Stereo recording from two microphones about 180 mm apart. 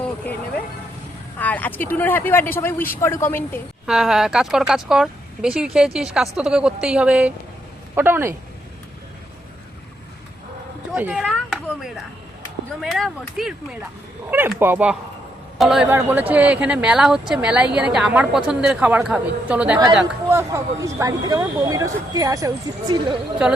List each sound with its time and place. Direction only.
1.4 s speech: 10° left (ahead or behind)
3.8 s speech: 5° right (ahead or behind)
10.9 s a man's voice: 5° right (ahead or behind)
20.3 s speech: 15° right (ahead or behind)